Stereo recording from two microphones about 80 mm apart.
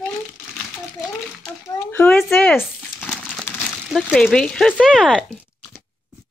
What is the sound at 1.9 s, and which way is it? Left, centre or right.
Speech, left.